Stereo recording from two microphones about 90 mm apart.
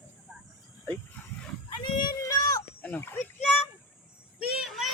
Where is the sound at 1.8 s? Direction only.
55° left (ahead or behind).